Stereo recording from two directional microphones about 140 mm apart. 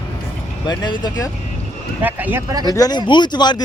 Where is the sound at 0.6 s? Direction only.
30° left (ahead or behind).